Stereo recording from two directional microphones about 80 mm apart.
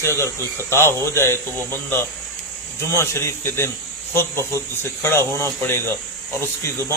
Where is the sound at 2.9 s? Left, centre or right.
Left.